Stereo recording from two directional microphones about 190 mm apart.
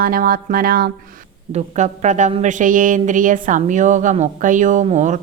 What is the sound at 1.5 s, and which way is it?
A woman's voice, 40° right (ahead or behind).